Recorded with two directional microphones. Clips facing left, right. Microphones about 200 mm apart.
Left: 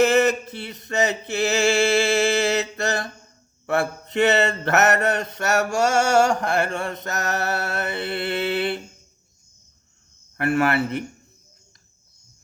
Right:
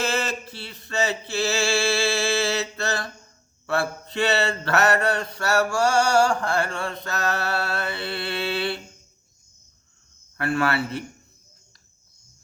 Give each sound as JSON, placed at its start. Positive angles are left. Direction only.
{"t": 0.0, "sound": "a sound", "side_deg": 20}
{"t": 3.7, "sound": "mantra", "side_deg": 20}
{"t": 10.6, "sound": "mantra", "side_deg": 20}